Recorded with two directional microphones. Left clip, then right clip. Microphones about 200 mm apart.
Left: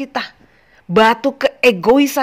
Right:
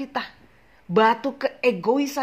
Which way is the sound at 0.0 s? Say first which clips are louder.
Left 6 dB; 35° left (ahead or behind).